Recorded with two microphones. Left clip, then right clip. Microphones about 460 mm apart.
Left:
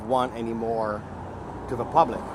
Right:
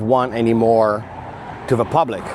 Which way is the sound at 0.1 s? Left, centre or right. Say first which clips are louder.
Right 9 dB; right.